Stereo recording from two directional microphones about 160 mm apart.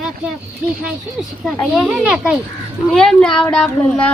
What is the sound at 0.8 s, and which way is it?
A child's voice, centre (ahead or behind).